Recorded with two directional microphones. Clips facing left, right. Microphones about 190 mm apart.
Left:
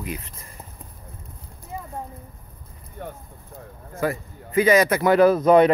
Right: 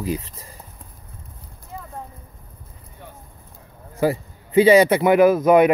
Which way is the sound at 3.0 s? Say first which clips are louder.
Left 8 dB; 55° left (ahead or behind).